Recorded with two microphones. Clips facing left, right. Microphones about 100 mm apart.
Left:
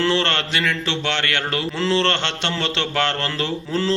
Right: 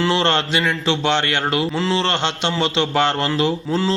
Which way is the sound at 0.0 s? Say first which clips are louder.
Right 2 dB; 15° right (ahead or behind).